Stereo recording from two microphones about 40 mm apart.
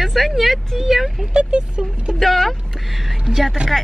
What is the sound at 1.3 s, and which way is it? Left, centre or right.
Speech, right.